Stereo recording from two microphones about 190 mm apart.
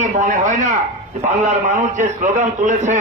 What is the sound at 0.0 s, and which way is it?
A man's voice, 40° right (ahead or behind).